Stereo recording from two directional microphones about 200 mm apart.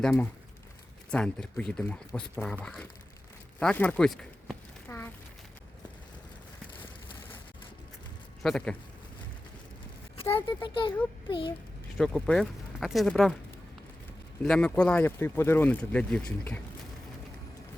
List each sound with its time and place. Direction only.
0.0 s speech: 5° left (ahead or behind)
3.6 s a sound: 5° left (ahead or behind)
8.4 s speech: centre (ahead or behind)
10.3 s a child's voice: 20° left (ahead or behind)
11.9 s speech: 5° left (ahead or behind)
14.4 s speech: 5° left (ahead or behind)